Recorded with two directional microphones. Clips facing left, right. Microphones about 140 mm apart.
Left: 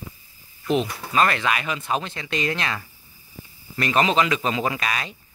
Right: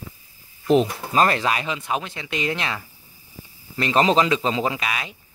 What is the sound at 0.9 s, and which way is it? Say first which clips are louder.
Speech: right 2 dB; 30° right (ahead or behind).